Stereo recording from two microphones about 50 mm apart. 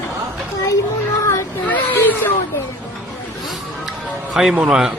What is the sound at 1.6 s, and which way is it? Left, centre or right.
Children playing, left.